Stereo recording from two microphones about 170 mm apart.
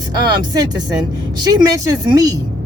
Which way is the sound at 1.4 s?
25° right (ahead or behind).